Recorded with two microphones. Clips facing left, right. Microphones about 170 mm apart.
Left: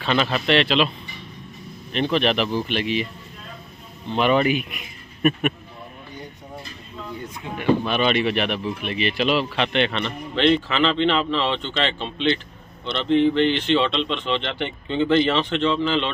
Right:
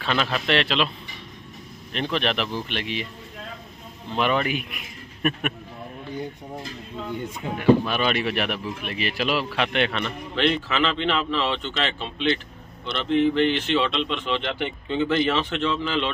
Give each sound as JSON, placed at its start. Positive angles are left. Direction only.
{"t": 0.0, "sound": "speech", "side_deg": 0}
{"t": 4.2, "sound": "speech", "side_deg": 0}
{"t": 7.5, "sound": "speech", "side_deg": -5}